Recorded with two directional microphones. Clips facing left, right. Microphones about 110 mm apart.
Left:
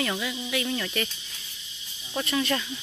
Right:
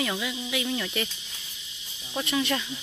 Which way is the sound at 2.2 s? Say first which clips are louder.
Even; 15° right (ahead or behind).